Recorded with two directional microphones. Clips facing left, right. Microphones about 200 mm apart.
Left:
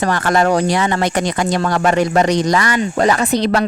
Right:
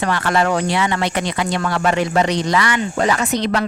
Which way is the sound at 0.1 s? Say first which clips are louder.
Left 3 dB; 45° left (ahead or behind).